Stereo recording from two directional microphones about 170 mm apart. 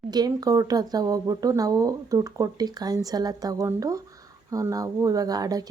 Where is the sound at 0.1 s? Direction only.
25° right (ahead or behind).